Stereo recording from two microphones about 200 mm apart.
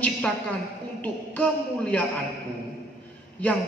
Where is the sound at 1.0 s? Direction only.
5° left (ahead or behind).